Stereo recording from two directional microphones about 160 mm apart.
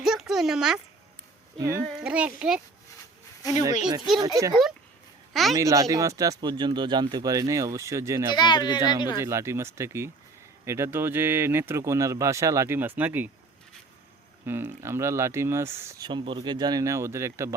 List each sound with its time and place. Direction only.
0.0 s a sound: centre (ahead or behind)
1.5 s speech: 20° right (ahead or behind)
2.0 s speech: 5° right (ahead or behind)
4.2 s speech: 20° right (ahead or behind)
5.3 s a woman's voice: centre (ahead or behind)
5.5 s speech: 20° right (ahead or behind)
8.4 s speech: 30° left (ahead or behind)
9.1 s speech: 20° right (ahead or behind)
14.4 s speech: 15° right (ahead or behind)
16.0 s speech: 30° right (ahead or behind)